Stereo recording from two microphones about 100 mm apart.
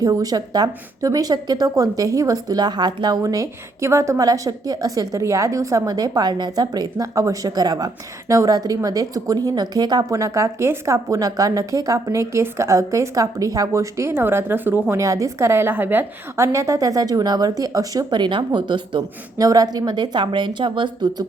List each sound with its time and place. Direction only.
0.0 s a woman's voice: 40° right (ahead or behind)
19.4 s a woman's voice: 40° right (ahead or behind)